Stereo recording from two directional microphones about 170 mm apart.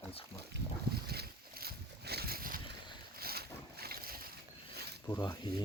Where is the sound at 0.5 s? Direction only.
70° right (ahead or behind).